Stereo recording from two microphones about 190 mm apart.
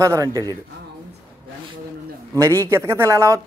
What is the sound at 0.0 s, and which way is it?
Speech, 15° right (ahead or behind).